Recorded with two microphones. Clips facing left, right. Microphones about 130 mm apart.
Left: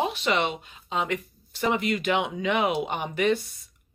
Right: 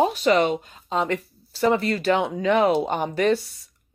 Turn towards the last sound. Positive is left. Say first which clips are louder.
# right 4 dB
turn(degrees=-40)  # may be behind; listen again after turning